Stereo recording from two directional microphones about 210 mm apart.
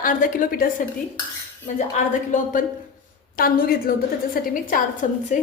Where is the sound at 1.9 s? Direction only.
35° left (ahead or behind).